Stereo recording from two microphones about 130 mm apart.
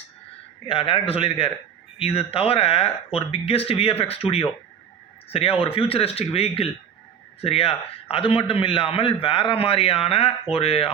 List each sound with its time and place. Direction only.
0.7 s speech: 45° left (ahead or behind)